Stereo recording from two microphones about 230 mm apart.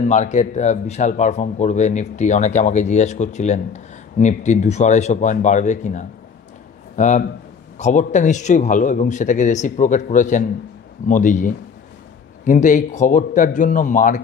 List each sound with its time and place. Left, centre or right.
0.0 s speech: left